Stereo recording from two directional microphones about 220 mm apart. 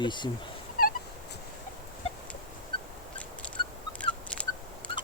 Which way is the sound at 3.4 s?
5° left (ahead or behind).